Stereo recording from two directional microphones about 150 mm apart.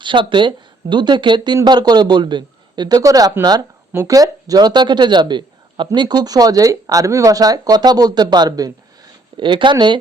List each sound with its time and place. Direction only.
0.0 s speech: 35° right (ahead or behind)